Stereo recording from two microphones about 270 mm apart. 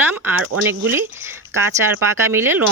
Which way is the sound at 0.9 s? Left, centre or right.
Centre.